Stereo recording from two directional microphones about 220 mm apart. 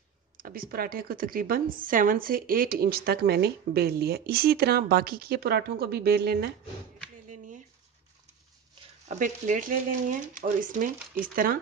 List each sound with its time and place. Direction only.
0.4 s a woman's voice: 40° right (ahead or behind)
7.2 s a sound: 35° right (ahead or behind)
9.0 s speech: 35° right (ahead or behind)